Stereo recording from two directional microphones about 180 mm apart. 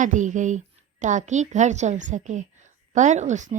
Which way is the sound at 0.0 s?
45° right (ahead or behind).